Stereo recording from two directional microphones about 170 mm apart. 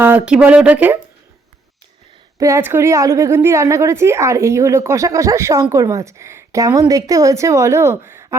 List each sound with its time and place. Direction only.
0.0 s a woman's voice: 10° right (ahead or behind)
2.4 s a woman's voice: 15° right (ahead or behind)